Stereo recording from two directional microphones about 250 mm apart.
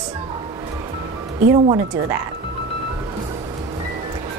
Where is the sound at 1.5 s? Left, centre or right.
Centre.